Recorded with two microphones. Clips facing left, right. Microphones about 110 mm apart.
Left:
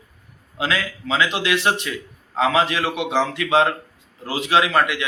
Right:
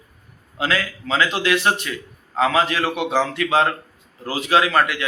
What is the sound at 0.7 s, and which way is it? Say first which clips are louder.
A man's voice: right 1 dB; 15° left (ahead or behind).